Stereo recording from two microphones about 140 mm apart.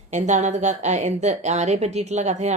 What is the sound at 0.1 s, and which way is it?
A woman's voice, 60° right (ahead or behind).